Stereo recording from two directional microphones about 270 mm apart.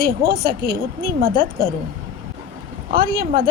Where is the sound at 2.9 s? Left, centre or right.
Right.